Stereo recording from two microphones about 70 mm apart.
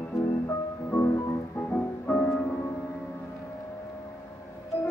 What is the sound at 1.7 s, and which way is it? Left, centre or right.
Music, left.